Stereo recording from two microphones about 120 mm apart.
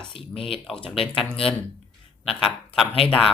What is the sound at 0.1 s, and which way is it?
Speech, 50° left (ahead or behind).